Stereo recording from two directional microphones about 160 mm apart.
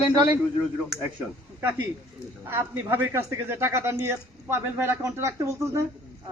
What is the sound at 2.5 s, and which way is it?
Speech, 15° right (ahead or behind).